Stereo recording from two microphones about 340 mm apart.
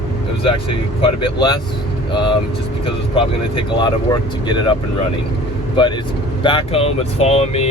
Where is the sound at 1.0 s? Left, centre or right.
Centre.